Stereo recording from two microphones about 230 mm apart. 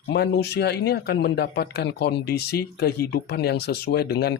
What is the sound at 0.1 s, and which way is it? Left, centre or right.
Speech, left.